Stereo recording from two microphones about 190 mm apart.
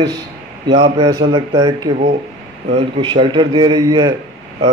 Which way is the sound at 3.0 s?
25° right (ahead or behind).